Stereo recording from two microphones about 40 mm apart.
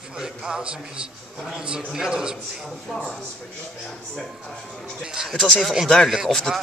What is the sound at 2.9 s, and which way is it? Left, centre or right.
Speech, centre.